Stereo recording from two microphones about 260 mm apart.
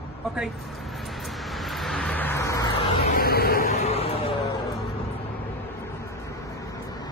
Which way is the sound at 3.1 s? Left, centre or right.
Left.